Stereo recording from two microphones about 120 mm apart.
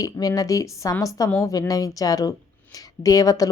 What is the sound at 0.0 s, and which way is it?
A woman's voice, 30° left (ahead or behind).